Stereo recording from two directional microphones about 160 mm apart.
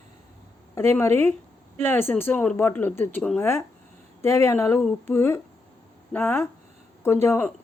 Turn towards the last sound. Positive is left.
turn(degrees=15)  # may be behind; listen again after turning